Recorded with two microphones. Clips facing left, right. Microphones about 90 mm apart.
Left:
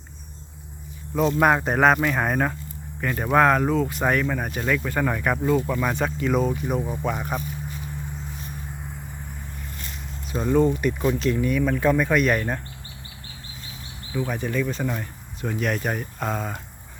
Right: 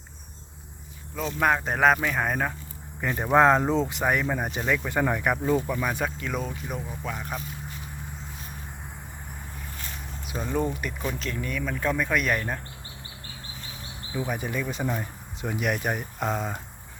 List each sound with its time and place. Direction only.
1.4 s speech: 5° left (ahead or behind)
3.0 s speech: 15° right (ahead or behind)
4.0 s speech: 10° right (ahead or behind); by 7.3 s 10° left (ahead or behind)
10.6 s speech: centre (ahead or behind)
14.1 s speech: 15° right (ahead or behind)